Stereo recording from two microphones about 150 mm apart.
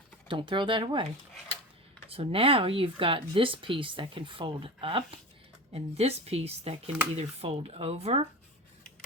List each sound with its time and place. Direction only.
0.3 s speech: 35° right (ahead or behind)
2.0 s speech: 40° right (ahead or behind)